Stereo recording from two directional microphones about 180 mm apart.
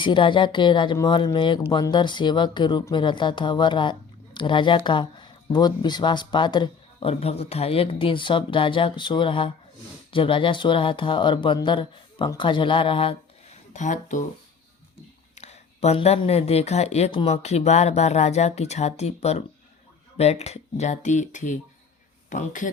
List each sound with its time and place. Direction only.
0.0 s speech: 25° left (ahead or behind)
13.7 s speech: 45° left (ahead or behind)
15.4 s speech: 35° left (ahead or behind)